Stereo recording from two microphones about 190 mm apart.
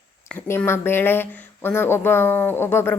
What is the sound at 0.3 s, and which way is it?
Speech, 10° left (ahead or behind).